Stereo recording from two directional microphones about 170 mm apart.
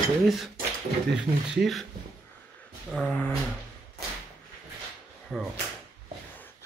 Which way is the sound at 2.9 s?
10° left (ahead or behind).